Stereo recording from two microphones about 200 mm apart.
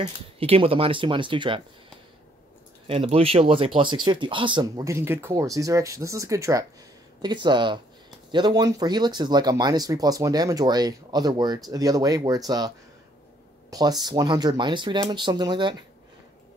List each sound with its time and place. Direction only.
0.0 s speech: 30° right (ahead or behind)
2.9 s speech: 30° right (ahead or behind)